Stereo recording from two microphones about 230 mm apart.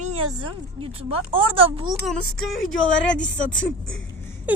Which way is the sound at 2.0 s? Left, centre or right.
Centre.